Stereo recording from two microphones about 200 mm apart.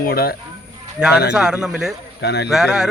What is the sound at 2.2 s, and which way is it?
Speech, 55° left (ahead or behind).